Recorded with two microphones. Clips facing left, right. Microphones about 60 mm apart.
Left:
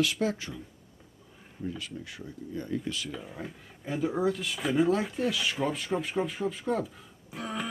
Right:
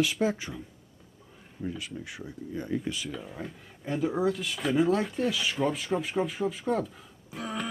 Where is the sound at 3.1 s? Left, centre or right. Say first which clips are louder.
Right 1 dB; centre.